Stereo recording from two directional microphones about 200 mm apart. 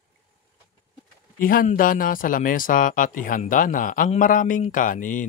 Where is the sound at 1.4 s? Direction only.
45° left (ahead or behind).